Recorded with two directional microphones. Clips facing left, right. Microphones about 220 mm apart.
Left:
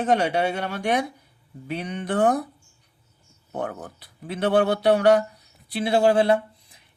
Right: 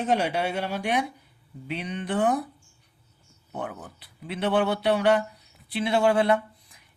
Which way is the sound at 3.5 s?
45° left (ahead or behind).